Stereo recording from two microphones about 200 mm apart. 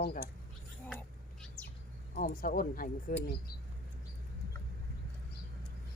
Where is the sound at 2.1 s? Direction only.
45° left (ahead or behind).